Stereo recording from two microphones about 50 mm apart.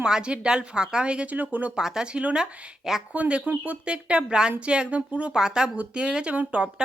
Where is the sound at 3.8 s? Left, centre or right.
Right.